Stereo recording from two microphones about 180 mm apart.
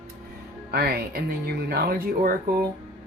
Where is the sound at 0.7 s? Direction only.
60° right (ahead or behind).